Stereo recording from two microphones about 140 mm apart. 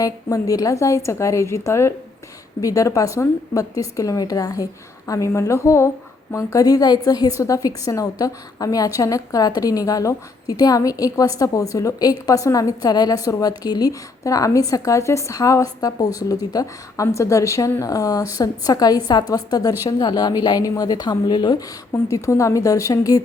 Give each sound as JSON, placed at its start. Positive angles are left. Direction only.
{"t": 0.0, "sound": "a woman's voice", "side_deg": 25}
{"t": 21.9, "sound": "a woman's voice", "side_deg": 20}